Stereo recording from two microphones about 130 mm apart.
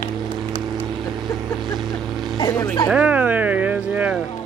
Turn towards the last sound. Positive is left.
turn(degrees=-10)  # may be behind; listen again after turning